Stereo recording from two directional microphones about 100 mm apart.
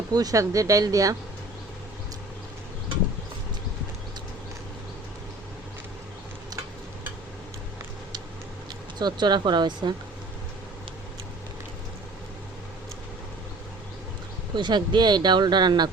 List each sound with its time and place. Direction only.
0.1 s speech: 40° right (ahead or behind)
9.0 s speech: 45° right (ahead or behind)
14.5 s speech: 50° right (ahead or behind)